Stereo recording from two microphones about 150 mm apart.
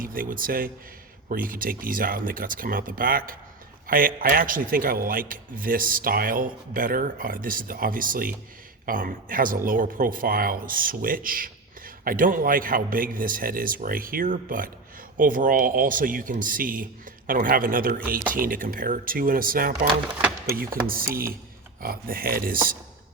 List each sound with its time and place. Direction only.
0.0 s a man's voice: 70° right (ahead or behind)